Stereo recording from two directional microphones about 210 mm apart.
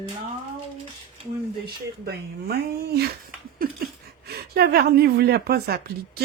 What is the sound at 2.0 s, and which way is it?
Speech, 50° right (ahead or behind).